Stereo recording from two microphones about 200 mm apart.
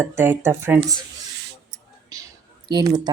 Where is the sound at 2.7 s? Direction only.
20° right (ahead or behind).